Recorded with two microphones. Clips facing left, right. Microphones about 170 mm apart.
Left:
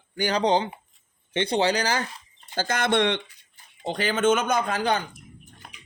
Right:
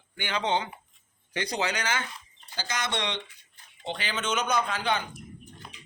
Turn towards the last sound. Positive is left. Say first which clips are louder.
# left 4 dB
turn(degrees=45)  # may be behind; listen again after turning